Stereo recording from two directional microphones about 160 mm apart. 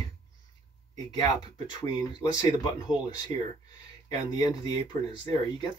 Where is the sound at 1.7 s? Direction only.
25° left (ahead or behind).